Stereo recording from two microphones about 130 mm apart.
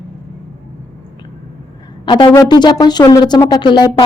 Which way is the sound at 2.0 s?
35° left (ahead or behind).